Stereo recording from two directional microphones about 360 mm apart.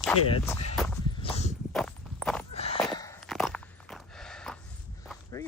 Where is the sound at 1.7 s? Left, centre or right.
Centre.